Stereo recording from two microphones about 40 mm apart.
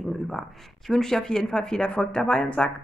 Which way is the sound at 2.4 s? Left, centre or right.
Left.